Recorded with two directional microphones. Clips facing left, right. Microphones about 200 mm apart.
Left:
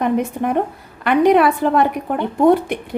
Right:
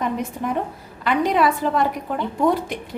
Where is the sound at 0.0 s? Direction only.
60° left (ahead or behind).